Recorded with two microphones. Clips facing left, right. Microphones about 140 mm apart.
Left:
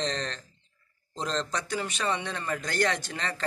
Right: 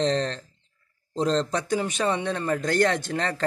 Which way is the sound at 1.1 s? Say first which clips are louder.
Right 7 dB; 30° right (ahead or behind).